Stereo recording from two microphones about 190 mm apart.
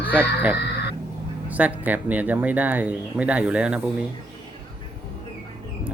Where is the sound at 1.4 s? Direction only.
10° right (ahead or behind).